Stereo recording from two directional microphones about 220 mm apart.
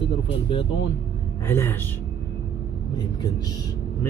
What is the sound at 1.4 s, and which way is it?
Speech, 10° left (ahead or behind).